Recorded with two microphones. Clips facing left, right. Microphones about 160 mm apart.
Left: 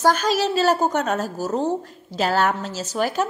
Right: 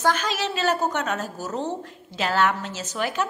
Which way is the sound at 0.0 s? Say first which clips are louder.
Left 5 dB; 40° left (ahead or behind).